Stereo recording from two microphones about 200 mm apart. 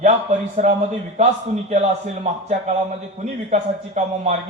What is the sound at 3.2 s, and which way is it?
A man's voice, 35° right (ahead or behind).